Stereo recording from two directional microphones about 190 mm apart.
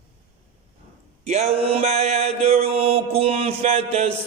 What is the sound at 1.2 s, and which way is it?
Mantra, 35° right (ahead or behind).